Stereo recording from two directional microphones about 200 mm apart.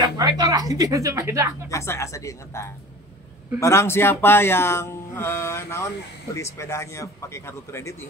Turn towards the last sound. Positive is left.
turn(degrees=15)  # may be behind; listen again after turning